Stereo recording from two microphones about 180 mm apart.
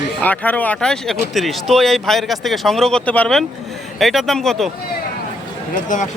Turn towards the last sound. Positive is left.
turn(degrees=45)  # may be behind; listen again after turning